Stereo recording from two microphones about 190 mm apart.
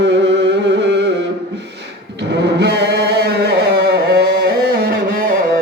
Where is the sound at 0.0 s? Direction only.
70° right (ahead or behind).